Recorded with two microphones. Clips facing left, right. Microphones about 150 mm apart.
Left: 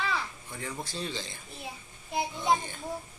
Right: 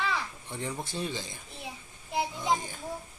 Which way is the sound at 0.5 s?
20° right (ahead or behind).